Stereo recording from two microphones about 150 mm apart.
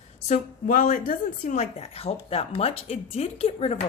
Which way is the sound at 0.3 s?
60° left (ahead or behind).